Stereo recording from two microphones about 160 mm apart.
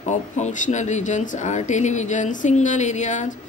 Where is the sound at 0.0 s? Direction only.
45° left (ahead or behind).